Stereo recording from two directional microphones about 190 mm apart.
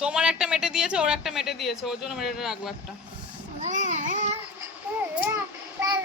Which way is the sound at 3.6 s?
40° right (ahead or behind).